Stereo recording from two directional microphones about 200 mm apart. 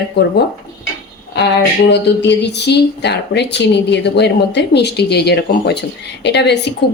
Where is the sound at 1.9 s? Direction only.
60° left (ahead or behind).